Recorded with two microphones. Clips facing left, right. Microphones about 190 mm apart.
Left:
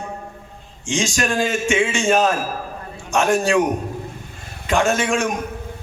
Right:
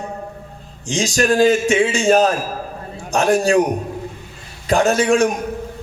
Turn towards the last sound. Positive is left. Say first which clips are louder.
# right 5 dB
turn(degrees=-35)  # may be behind; listen again after turning